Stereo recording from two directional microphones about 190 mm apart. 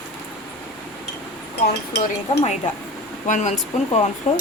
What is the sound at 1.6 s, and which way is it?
Speech, 60° left (ahead or behind).